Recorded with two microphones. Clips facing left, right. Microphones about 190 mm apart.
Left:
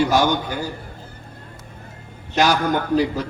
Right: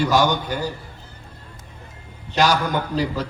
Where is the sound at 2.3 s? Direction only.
50° left (ahead or behind).